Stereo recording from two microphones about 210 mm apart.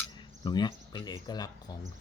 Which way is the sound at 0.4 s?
20° left (ahead or behind).